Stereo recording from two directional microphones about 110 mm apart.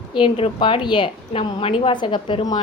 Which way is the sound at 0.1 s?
55° left (ahead or behind).